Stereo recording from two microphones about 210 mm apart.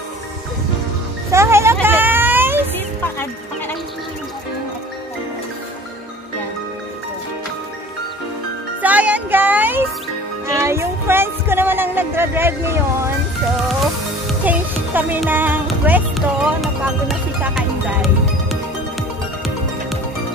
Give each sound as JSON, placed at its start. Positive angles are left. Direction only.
{"t": 1.3, "sound": "a sound", "side_deg": -10}
{"t": 8.8, "sound": "music", "side_deg": -5}
{"t": 14.2, "sound": "music", "side_deg": -5}